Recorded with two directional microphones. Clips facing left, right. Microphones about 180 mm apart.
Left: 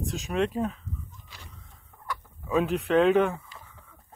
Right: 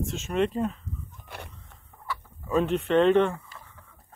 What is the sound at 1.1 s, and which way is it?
Fowl, 60° right (ahead or behind).